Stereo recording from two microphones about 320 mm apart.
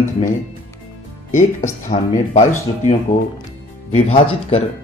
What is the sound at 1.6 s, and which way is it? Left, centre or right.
Speech, centre.